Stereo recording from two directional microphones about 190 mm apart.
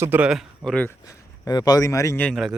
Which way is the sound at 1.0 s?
20° left (ahead or behind).